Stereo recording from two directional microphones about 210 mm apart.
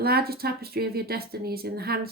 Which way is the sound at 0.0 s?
45° right (ahead or behind).